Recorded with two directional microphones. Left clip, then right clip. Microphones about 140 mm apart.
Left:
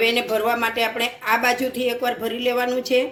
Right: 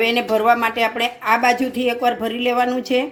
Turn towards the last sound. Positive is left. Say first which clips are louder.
# right 2 dB
turn(degrees=-50)  # may be behind; listen again after turning